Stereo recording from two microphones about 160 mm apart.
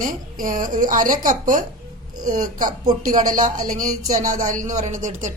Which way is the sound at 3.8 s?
50° right (ahead or behind).